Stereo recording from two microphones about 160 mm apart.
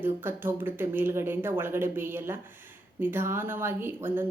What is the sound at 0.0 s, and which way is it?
Speech, 15° right (ahead or behind).